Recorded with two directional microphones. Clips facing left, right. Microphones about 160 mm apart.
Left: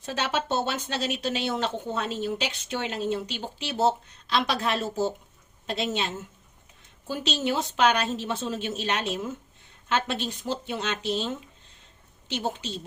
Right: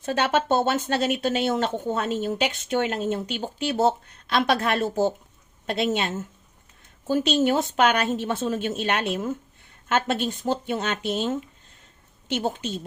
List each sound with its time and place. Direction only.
0.0 s a woman's voice: 50° right (ahead or behind)
12.3 s speech: 50° right (ahead or behind)